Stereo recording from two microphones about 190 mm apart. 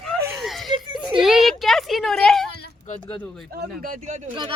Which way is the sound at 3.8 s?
45° right (ahead or behind).